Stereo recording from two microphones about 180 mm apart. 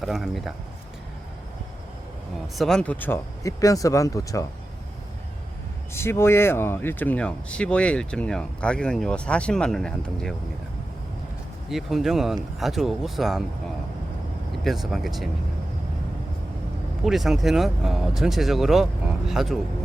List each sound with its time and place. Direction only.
0.0 s speech: centre (ahead or behind)
2.6 s speech: 5° left (ahead or behind)
5.9 s speech: 15° left (ahead or behind)
11.7 s speech: centre (ahead or behind)
14.6 s speech: centre (ahead or behind)
17.0 s speech: centre (ahead or behind)